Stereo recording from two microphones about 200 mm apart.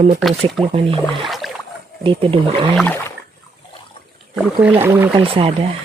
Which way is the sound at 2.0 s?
25° right (ahead or behind).